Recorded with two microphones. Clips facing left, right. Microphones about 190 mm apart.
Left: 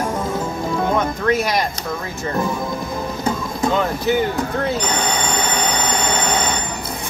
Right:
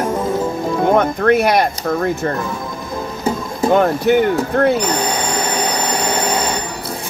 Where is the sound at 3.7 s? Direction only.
60° right (ahead or behind).